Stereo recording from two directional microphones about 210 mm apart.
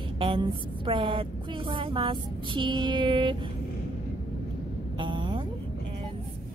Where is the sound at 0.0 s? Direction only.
25° right (ahead or behind).